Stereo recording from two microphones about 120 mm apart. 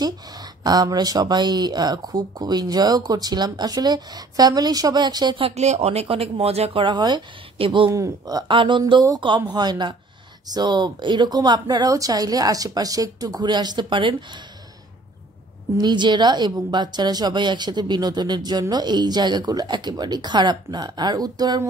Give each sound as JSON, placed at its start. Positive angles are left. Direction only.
{"t": 0.7, "sound": "a woman's voice", "side_deg": -35}
{"t": 5.6, "sound": "speech", "side_deg": -65}
{"t": 7.9, "sound": "a woman's voice", "side_deg": -30}
{"t": 15.8, "sound": "a woman's voice", "side_deg": -40}